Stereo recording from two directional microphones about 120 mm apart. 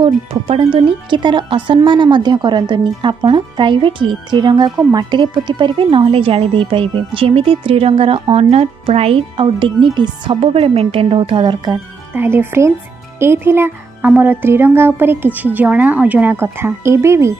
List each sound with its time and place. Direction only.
0.0 s speech: 50° right (ahead or behind)
12.1 s speech: 15° right (ahead or behind)